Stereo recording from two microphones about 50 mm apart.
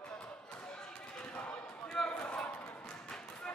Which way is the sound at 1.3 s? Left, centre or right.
Centre.